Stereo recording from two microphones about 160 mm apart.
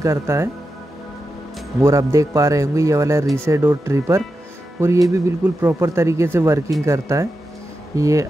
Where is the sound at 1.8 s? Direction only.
15° right (ahead or behind).